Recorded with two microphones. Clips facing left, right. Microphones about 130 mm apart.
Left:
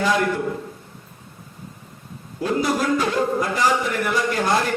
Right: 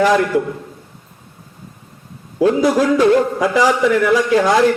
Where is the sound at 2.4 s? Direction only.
90° right.